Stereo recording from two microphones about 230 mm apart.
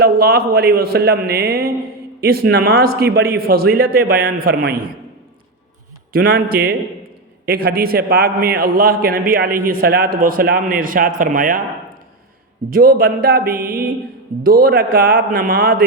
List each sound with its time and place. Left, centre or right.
0.0 s a man's voice: right
6.1 s a man's voice: right
12.7 s a man's voice: right